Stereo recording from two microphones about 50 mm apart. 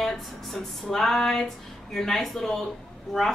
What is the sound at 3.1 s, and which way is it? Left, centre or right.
Speech, centre.